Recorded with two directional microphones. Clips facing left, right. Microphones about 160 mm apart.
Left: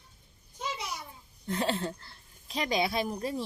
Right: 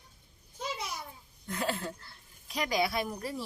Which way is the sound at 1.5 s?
25° left (ahead or behind).